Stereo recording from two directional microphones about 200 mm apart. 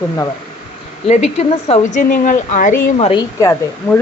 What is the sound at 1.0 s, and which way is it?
A woman's voice, 35° left (ahead or behind).